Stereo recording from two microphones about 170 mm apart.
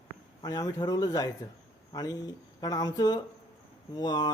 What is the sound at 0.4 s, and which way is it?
Speech, 20° left (ahead or behind).